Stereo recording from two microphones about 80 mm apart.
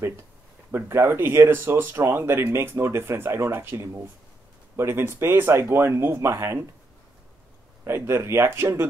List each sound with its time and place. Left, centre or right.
0.7 s speech: right
7.8 s speech: right